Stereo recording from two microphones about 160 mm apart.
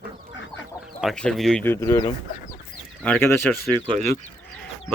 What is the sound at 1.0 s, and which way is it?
Speech, 5° left (ahead or behind).